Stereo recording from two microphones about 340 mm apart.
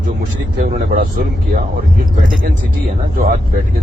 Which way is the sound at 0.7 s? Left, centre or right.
Right.